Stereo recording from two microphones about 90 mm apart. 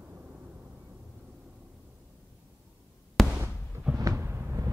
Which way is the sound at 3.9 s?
40° right (ahead or behind).